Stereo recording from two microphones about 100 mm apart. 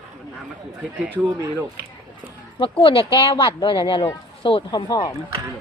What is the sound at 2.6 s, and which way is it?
Speech, 70° left (ahead or behind).